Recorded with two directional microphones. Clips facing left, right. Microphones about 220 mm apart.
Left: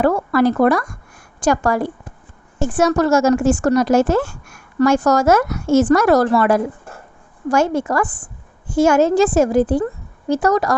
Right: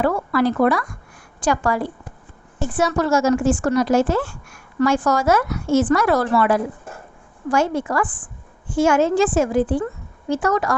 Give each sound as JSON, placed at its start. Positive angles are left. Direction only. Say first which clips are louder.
{"t": 0.0, "sound": "a woman's voice", "louder": "left 4 dB", "side_deg": 45}